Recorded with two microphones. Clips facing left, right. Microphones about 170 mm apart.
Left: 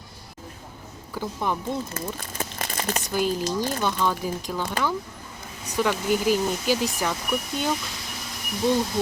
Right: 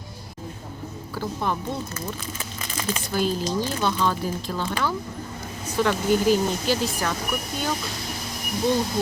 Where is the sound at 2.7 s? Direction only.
40° left (ahead or behind).